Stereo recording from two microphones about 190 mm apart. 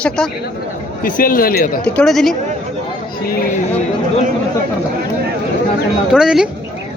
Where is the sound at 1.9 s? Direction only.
Centre (ahead or behind).